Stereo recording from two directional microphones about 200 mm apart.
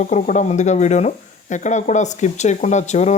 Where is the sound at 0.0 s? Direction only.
40° left (ahead or behind).